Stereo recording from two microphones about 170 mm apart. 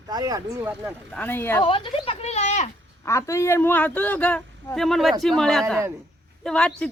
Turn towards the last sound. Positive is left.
turn(degrees=5)  # may be behind; listen again after turning